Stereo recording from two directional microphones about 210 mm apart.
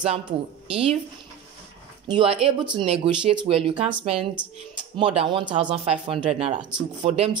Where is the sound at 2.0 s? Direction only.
25° right (ahead or behind).